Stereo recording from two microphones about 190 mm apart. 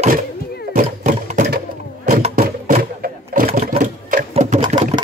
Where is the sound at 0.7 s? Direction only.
35° right (ahead or behind).